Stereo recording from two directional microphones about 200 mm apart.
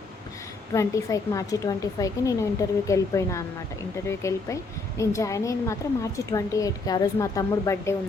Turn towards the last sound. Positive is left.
turn(degrees=15)  # may be behind; listen again after turning